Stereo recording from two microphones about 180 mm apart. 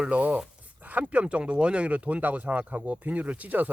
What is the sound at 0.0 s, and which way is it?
Speech, 10° right (ahead or behind).